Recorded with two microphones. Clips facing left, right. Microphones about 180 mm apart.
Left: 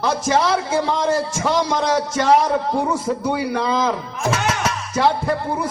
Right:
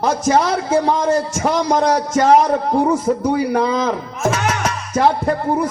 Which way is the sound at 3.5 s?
50° right (ahead or behind).